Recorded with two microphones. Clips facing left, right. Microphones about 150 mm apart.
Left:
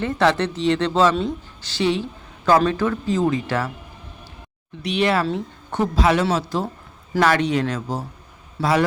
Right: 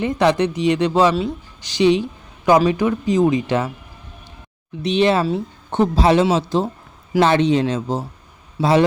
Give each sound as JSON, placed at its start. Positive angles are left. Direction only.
{"t": 0.0, "sound": "speech", "side_deg": -15}
{"t": 4.8, "sound": "speech", "side_deg": -20}
{"t": 8.6, "sound": "speech", "side_deg": -10}